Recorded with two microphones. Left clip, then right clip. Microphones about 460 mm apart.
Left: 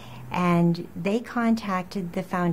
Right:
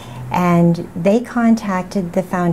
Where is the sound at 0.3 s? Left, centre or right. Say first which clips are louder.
Right 8 dB; right.